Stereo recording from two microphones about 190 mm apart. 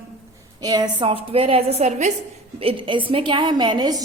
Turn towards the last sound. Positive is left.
turn(degrees=-20)  # may be behind; listen again after turning